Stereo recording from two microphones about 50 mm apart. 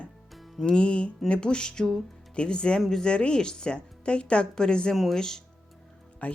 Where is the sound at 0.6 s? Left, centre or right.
Left.